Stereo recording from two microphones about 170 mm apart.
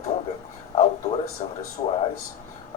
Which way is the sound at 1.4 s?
35° left (ahead or behind).